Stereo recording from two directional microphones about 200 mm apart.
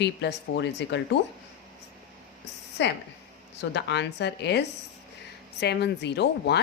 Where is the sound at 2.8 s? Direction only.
60° left (ahead or behind).